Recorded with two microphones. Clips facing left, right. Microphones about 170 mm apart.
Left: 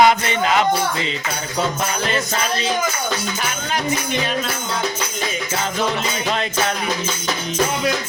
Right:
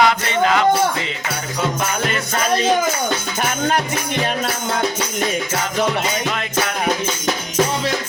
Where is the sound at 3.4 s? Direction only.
50° right (ahead or behind).